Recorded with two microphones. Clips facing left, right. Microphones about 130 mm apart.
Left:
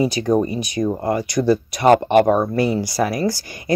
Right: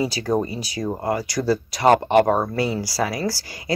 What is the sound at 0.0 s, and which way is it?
Speech, 20° left (ahead or behind).